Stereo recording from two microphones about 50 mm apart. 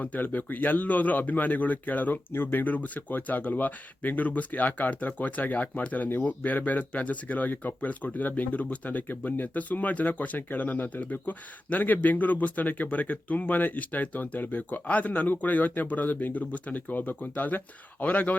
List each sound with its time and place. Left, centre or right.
0.0 s speech: left
2.3 s speech: left